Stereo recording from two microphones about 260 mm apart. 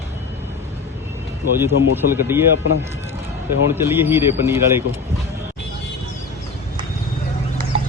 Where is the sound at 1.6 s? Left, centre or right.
Centre.